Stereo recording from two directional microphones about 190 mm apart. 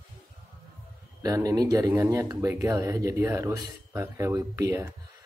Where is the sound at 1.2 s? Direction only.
20° right (ahead or behind).